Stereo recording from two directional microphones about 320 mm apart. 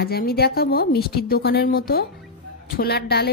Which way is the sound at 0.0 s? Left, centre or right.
Left.